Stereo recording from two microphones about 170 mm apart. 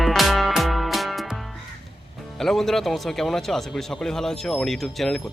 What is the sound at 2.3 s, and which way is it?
Speech, centre (ahead or behind).